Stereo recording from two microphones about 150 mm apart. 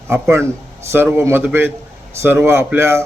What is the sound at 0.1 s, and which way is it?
A man's voice, 15° right (ahead or behind).